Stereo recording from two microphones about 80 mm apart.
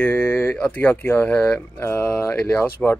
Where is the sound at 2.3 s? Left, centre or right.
Centre.